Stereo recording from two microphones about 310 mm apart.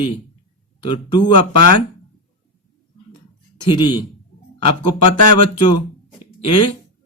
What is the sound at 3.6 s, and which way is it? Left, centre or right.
Speech, centre.